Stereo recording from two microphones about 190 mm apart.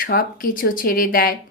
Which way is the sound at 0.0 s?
50° left (ahead or behind).